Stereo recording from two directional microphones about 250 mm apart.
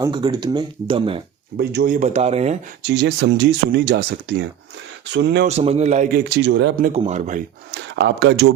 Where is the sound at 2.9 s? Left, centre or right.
Right.